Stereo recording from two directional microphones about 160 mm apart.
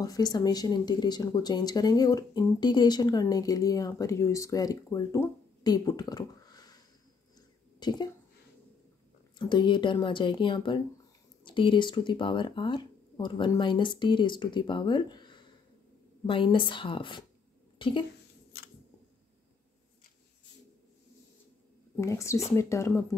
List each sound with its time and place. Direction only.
0.0 s speech: 25° left (ahead or behind)
7.8 s speech: 25° left (ahead or behind)
9.4 s a woman's voice: 30° left (ahead or behind)
21.9 s speech: 20° left (ahead or behind)